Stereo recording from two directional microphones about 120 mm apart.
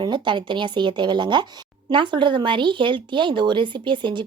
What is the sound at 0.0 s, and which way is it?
Speech, 40° right (ahead or behind).